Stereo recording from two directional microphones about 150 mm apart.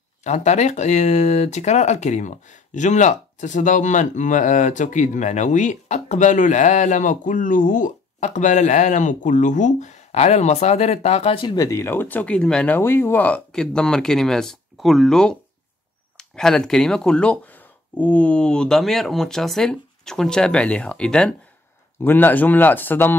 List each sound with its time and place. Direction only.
0.2 s speech: 50° left (ahead or behind)
11.5 s speech: 20° left (ahead or behind)